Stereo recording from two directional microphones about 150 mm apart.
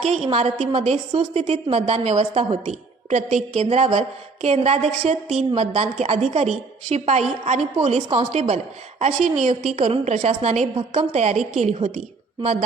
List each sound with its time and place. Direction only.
0.3 s a woman's voice: 45° right (ahead or behind)